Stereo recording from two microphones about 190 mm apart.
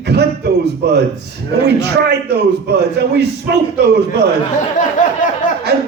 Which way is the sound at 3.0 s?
60° right (ahead or behind).